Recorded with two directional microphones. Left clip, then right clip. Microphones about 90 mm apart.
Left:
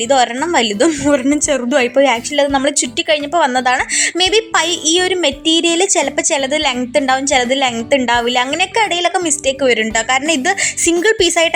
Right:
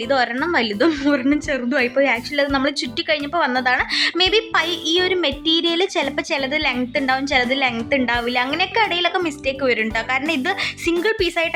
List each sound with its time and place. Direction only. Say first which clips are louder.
0.1 s a woman's voice: left 5 dB; 40° left (ahead or behind)
3.9 s speech: left 3 dB; 20° left (ahead or behind)
4.3 s a woman's voice: left 4 dB; 35° left (ahead or behind); by 11.5 s 55° left (ahead or behind)